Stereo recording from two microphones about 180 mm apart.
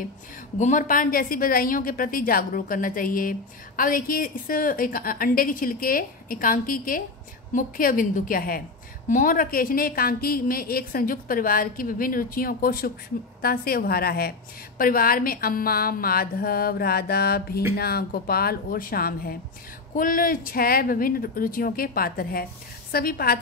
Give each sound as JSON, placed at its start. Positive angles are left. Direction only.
{"t": 0.6, "sound": "a woman's voice", "side_deg": 45}